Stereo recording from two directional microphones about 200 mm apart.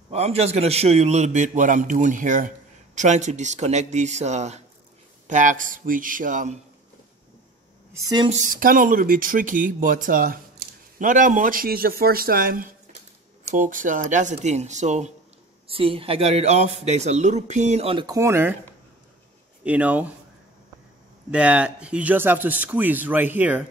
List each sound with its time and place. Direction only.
0.1 s a man's voice: 30° right (ahead or behind)
7.9 s a woman's voice: 20° right (ahead or behind)
8.3 s a man's voice: 45° right (ahead or behind); by 18.6 s 10° right (ahead or behind)
19.6 s speech: 5° right (ahead or behind)
21.3 s speech: 5° right (ahead or behind)